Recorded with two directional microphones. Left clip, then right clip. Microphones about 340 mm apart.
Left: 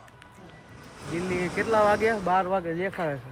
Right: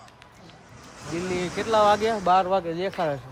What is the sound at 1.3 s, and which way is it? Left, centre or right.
A man's voice, centre.